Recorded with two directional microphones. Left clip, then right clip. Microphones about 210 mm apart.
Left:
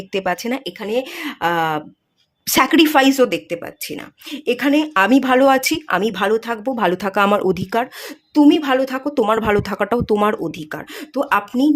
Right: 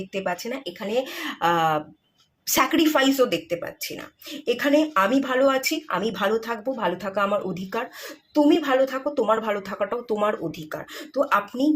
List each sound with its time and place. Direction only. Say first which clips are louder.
0.1 s speech: left 8 dB; 50° left (ahead or behind)